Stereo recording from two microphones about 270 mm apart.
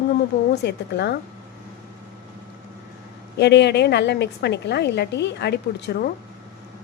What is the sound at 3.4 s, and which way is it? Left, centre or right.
A woman's voice, left.